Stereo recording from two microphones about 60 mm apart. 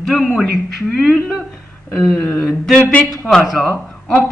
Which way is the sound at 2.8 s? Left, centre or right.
Left.